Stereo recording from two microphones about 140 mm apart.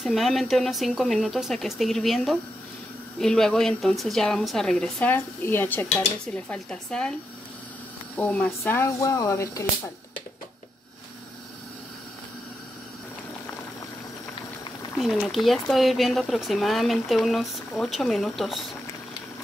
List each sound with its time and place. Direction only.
0.0 s speech: centre (ahead or behind)
5.1 s speech: 15° left (ahead or behind)
8.2 s speech: 10° left (ahead or behind)
15.0 s speech: centre (ahead or behind)